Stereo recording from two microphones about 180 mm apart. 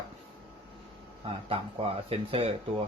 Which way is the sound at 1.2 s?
30° right (ahead or behind).